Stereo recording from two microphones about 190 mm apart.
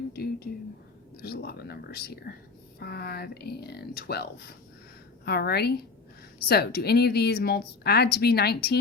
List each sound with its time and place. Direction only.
0.1 s a woman's voice: 55° left (ahead or behind)